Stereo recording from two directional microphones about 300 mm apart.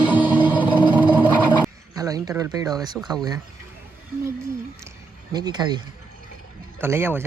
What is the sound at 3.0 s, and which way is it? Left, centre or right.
Speech, centre.